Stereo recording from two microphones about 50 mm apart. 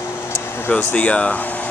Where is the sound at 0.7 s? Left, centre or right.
Left.